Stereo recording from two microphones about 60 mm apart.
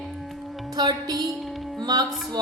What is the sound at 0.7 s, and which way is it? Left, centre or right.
A woman's voice, right.